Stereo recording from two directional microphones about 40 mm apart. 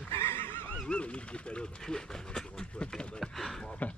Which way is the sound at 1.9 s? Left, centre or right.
Centre.